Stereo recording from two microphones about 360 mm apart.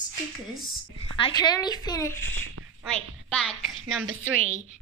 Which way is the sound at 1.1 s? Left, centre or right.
Centre.